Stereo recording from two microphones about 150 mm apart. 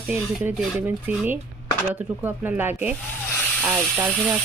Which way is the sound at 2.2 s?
10° right (ahead or behind).